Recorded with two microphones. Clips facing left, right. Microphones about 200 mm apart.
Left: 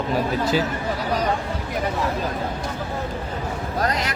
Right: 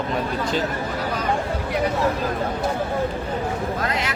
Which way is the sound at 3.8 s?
40° left (ahead or behind).